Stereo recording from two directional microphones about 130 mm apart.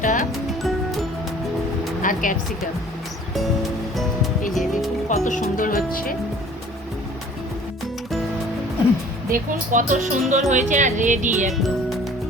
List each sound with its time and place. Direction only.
0.0 s speech: 80° left
2.0 s speech: 85° left
4.5 s music: centre (ahead or behind)
5.0 s speech: 70° left (ahead or behind); by 6.1 s 90° left
9.3 s speech: 85° right